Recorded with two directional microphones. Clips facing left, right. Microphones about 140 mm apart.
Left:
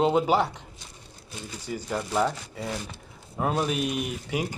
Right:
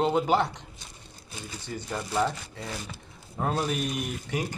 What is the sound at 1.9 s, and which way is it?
Speech, 5° left (ahead or behind).